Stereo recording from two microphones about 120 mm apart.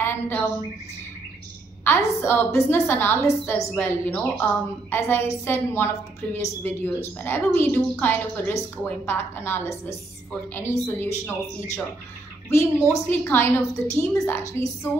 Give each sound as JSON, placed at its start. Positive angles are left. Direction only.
{"t": 0.0, "sound": "a woman's voice", "side_deg": 15}
{"t": 1.9, "sound": "a woman's voice", "side_deg": 20}
{"t": 12.8, "sound": "a woman's voice", "side_deg": 20}